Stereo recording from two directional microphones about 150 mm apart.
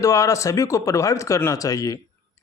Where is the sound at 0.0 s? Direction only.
20° left (ahead or behind).